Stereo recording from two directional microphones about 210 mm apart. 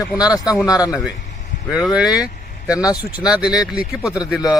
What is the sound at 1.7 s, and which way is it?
Speech, 5° right (ahead or behind).